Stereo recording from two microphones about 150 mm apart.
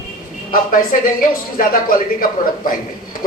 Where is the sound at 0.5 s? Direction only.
70° left (ahead or behind).